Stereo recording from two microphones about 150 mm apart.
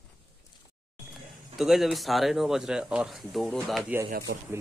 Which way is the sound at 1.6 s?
Centre (ahead or behind).